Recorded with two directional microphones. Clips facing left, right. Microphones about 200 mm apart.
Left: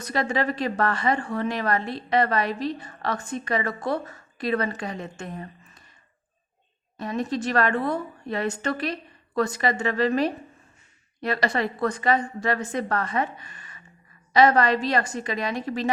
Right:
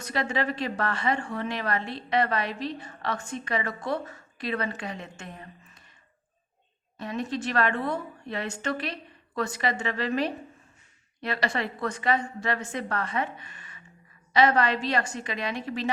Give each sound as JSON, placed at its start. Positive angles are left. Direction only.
{"t": 0.0, "sound": "a woman's voice", "side_deg": 40}
{"t": 6.9, "sound": "a woman's voice", "side_deg": 40}